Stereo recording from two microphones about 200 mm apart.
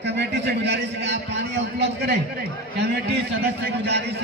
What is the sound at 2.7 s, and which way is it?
A man's voice, 60° right (ahead or behind).